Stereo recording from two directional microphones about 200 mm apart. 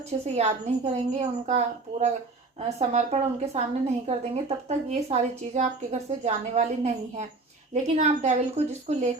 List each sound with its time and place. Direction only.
0.0 s a woman's voice: 35° right (ahead or behind)